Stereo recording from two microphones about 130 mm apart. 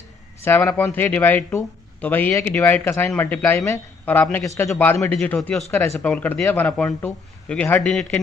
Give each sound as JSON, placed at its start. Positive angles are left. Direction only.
{"t": 0.5, "sound": "speech", "side_deg": 15}